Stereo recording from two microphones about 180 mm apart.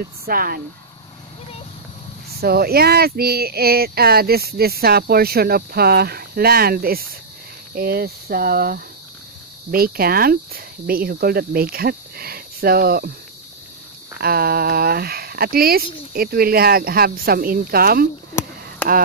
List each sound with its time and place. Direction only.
0.3 s speech: 55° right (ahead or behind)
2.4 s speech: 60° right (ahead or behind)
14.2 s speech: 60° right (ahead or behind)